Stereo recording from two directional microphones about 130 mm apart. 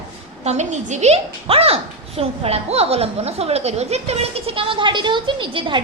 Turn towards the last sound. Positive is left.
turn(degrees=-40)  # may be behind; listen again after turning